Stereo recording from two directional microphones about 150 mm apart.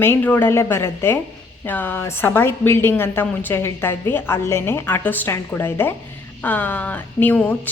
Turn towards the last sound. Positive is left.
turn(degrees=10)  # may be behind; listen again after turning